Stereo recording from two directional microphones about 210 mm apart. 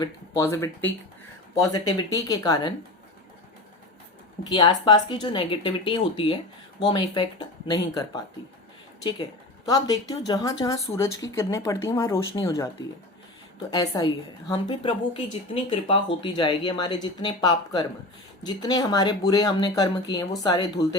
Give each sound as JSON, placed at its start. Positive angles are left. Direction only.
{"t": 0.0, "sound": "speech", "side_deg": 15}
{"t": 4.4, "sound": "speech", "side_deg": 20}
{"t": 9.6, "sound": "speech", "side_deg": 15}
{"t": 13.7, "sound": "speech", "side_deg": 20}